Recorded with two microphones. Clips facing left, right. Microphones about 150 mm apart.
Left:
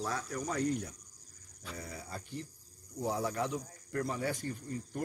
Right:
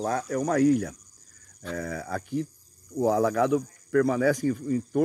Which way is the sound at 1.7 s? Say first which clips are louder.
Right 12 dB; 90° right.